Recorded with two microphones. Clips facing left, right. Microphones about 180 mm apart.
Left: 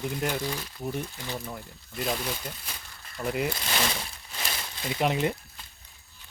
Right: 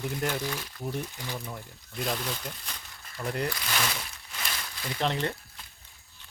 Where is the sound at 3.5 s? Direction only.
25° left (ahead or behind).